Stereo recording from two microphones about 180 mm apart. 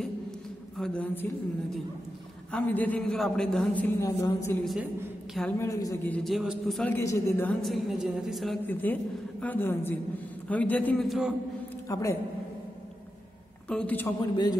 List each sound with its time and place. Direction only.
0.7 s a man's voice: 5° left (ahead or behind)
2.5 s a man's voice: 10° left (ahead or behind)
6.1 s a man's voice: centre (ahead or behind)
7.6 s a woman's voice: centre (ahead or behind)
11.9 s a man's voice: 15° left (ahead or behind)
13.7 s a man's voice: 5° left (ahead or behind)
14.2 s a man's voice: 25° left (ahead or behind)